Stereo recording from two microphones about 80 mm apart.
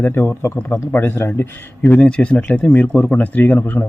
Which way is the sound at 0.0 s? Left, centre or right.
Left.